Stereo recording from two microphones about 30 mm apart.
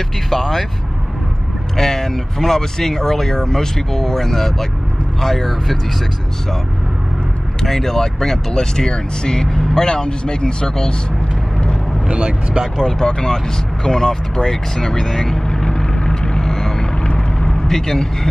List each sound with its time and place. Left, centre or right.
0.3 s speech: centre
1.8 s speech: centre
7.6 s speech: centre; by 11.0 s left
12.1 s speech: right
12.8 s speech: left
16.3 s vehicle: centre
17.4 s speech: left